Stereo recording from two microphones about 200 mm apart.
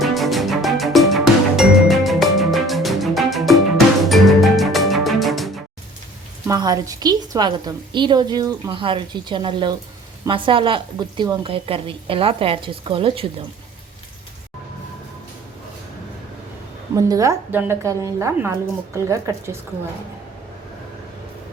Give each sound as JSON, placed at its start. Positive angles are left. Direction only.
{"t": 0.0, "sound": "music", "side_deg": 0}
{"t": 6.5, "sound": "a woman's voice", "side_deg": -20}
{"t": 16.9, "sound": "a woman's voice", "side_deg": -15}